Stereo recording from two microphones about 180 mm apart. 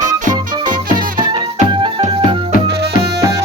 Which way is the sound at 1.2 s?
30° right (ahead or behind).